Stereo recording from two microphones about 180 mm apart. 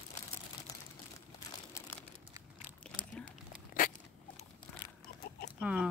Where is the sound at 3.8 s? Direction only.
50° left (ahead or behind).